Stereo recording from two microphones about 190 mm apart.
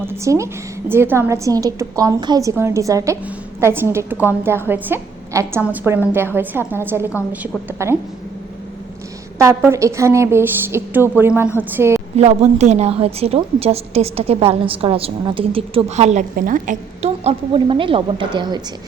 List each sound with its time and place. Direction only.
0.1 s a woman's voice: 15° right (ahead or behind)
9.4 s a woman's voice: 15° right (ahead or behind)
12.1 s a woman's voice: 35° right (ahead or behind)